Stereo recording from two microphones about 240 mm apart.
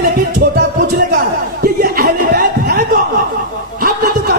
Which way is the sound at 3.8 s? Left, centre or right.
Right.